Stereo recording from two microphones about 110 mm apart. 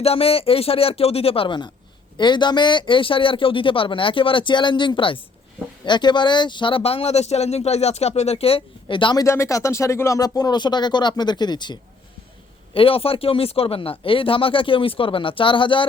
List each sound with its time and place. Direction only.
0.0 s speech: 65° left (ahead or behind)
9.1 s speech: 25° left (ahead or behind); by 11.8 s 40° left (ahead or behind)
12.7 s speech: 60° left (ahead or behind)